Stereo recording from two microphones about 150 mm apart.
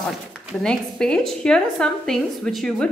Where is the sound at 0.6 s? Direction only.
5° left (ahead or behind).